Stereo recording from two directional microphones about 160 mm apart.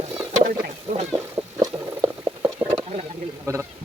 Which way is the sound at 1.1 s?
15° right (ahead or behind).